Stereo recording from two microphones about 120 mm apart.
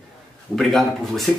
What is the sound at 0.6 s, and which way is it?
Speech, centre (ahead or behind).